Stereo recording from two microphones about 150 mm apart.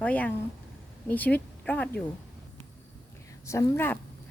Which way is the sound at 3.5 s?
20° left (ahead or behind).